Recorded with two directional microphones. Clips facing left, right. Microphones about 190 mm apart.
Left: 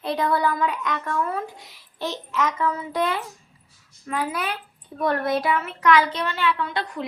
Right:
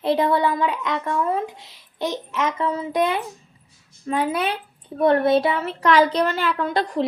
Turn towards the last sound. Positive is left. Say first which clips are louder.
# right 6 dB
turn(degrees=-35)  # may be behind; listen again after turning